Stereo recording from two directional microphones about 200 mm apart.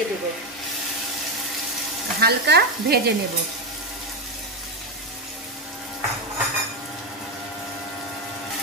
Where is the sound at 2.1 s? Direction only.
55° right (ahead or behind).